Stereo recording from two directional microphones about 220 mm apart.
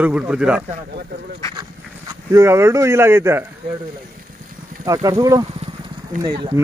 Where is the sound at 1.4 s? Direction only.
15° left (ahead or behind).